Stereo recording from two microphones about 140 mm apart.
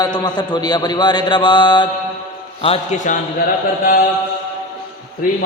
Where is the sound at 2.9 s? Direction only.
65° left (ahead or behind).